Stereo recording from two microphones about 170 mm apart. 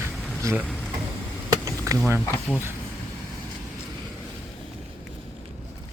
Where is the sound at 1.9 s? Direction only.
20° right (ahead or behind).